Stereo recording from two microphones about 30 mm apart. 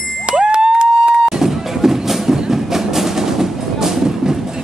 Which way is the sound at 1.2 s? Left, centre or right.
Centre.